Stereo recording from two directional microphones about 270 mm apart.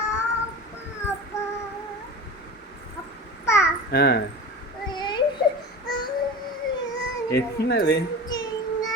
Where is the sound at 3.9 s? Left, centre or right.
Left.